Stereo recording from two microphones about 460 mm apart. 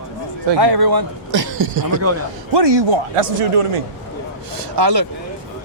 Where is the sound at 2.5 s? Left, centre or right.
Right.